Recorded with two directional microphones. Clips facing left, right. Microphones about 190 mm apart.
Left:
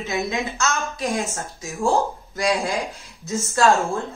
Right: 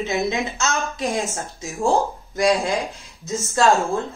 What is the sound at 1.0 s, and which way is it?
Speech, 15° right (ahead or behind).